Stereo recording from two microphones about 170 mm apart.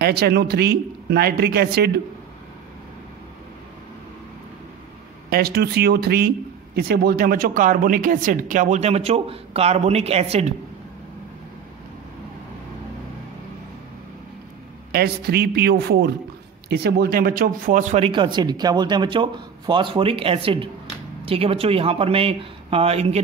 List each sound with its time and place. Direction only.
0.0 s speech: 70° right (ahead or behind)
5.3 s speech: 65° right (ahead or behind); by 10.2 s 40° right (ahead or behind)
14.9 s speech: 65° right (ahead or behind); by 23.2 s 35° right (ahead or behind)